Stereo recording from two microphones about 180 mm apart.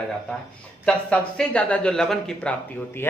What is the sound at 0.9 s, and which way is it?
Speech, 5° left (ahead or behind).